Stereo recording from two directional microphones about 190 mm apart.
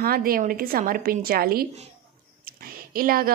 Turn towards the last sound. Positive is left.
turn(degrees=-50)  # may be behind; listen again after turning